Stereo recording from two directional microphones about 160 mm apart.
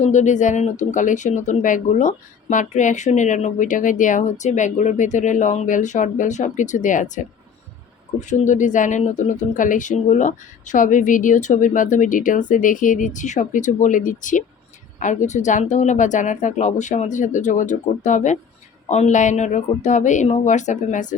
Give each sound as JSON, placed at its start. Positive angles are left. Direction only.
{"t": 0.0, "sound": "speech", "side_deg": 50}